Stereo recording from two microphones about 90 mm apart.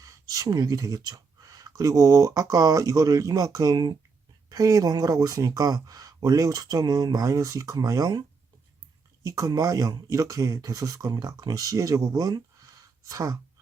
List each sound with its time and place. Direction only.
0.0 s speech: 40° right (ahead or behind)
9.2 s speech: 40° right (ahead or behind)